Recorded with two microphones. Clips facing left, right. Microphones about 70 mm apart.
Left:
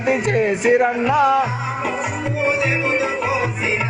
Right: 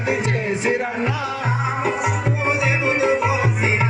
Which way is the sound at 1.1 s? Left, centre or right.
Left.